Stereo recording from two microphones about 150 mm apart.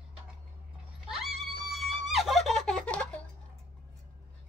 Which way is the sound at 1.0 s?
Centre (ahead or behind).